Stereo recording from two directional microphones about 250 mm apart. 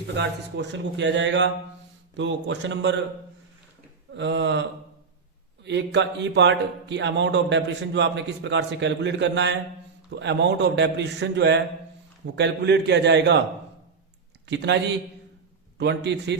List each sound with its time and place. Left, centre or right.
0.2 s speech: right
4.1 s speech: right
5.6 s speech: right
14.4 s speech: right